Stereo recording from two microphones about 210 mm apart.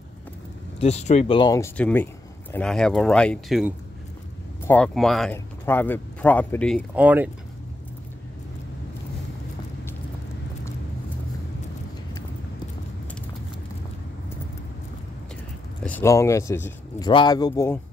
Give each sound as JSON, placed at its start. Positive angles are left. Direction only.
{"t": 0.7, "sound": "speech", "side_deg": 30}
{"t": 1.8, "sound": "speech", "side_deg": 5}
{"t": 7.0, "sound": "speech", "side_deg": -5}
{"t": 15.8, "sound": "speech", "side_deg": 10}